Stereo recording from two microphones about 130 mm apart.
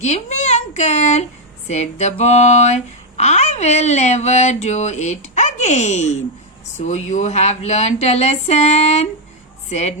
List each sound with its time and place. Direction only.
0.0 s a woman's voice: 60° left (ahead or behind)